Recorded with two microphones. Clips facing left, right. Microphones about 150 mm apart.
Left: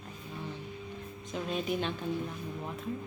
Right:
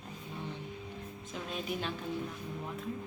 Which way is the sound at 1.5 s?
Centre (ahead or behind).